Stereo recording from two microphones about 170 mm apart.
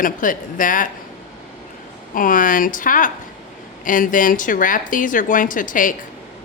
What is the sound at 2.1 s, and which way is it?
Speech, 55° left (ahead or behind).